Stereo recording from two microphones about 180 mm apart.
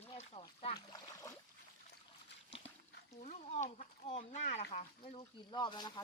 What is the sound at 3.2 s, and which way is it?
Speech, 40° left (ahead or behind).